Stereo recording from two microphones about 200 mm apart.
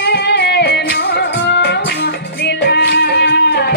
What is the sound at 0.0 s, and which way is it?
Music, 55° left (ahead or behind).